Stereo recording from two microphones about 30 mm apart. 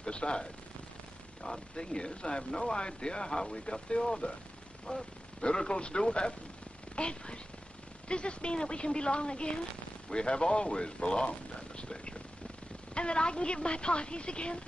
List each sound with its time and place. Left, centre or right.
0.0 s speech: left